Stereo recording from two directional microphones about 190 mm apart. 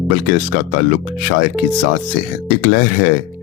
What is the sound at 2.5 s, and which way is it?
Speech, 50° left (ahead or behind).